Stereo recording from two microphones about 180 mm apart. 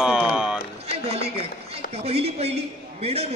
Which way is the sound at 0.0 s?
5° right (ahead or behind).